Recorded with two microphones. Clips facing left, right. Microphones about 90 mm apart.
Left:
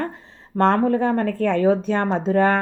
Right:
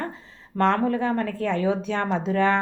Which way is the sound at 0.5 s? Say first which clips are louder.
Left 4 dB; 45° left (ahead or behind).